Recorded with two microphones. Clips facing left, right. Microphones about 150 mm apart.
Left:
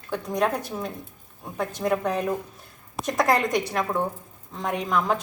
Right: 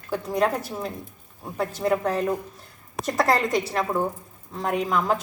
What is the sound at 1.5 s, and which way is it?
A woman's voice, centre (ahead or behind).